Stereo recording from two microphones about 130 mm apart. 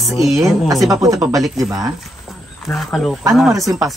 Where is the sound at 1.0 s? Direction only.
25° right (ahead or behind).